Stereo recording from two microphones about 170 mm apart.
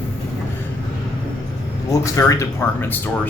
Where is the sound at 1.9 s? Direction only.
20° left (ahead or behind).